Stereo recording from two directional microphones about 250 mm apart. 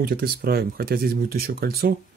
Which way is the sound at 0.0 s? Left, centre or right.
Right.